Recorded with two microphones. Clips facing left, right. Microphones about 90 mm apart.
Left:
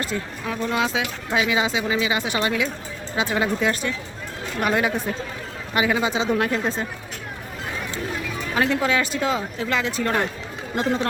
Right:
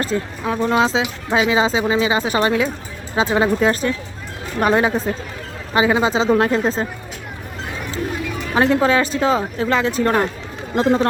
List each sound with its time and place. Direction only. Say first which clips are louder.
0.0 s speech: right 6 dB; 35° right (ahead or behind)
8.5 s speech: right 6 dB; 35° right (ahead or behind)